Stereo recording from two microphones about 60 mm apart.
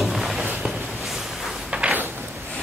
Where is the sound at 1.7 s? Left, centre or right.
Centre.